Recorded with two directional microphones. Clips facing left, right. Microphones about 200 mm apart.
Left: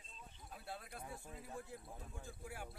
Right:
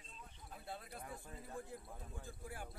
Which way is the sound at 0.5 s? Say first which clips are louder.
Right 1 dB; centre (ahead or behind).